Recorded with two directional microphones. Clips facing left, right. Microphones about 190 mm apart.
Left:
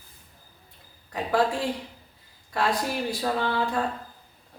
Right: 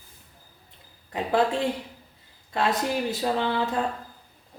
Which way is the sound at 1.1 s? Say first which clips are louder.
Right 1 dB; 25° right (ahead or behind).